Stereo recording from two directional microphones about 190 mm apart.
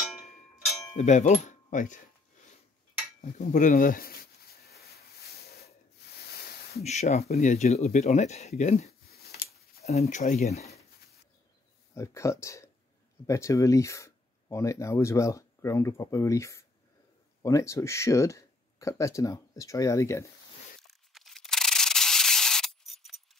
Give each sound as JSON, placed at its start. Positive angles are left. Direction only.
{"t": 0.9, "sound": "speech", "side_deg": 40}
{"t": 3.2, "sound": "a sound", "side_deg": 40}
{"t": 6.8, "sound": "speech", "side_deg": 35}
{"t": 11.9, "sound": "speech", "side_deg": 15}
{"t": 20.8, "sound": "sanding", "side_deg": 0}